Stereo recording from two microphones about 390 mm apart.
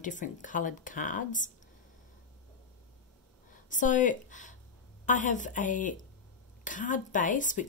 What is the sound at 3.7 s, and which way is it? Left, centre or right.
Speech, centre.